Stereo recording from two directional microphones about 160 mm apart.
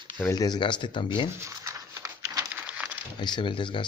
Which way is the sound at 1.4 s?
20° right (ahead or behind).